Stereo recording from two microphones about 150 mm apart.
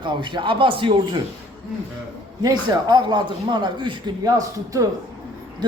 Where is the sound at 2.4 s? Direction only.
30° right (ahead or behind).